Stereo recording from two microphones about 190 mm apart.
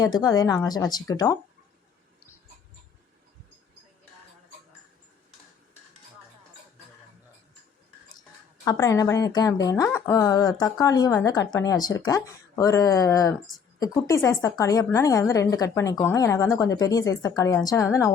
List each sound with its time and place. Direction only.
0.0 s speech: 20° left (ahead or behind)
8.6 s a woman's voice: 20° left (ahead or behind)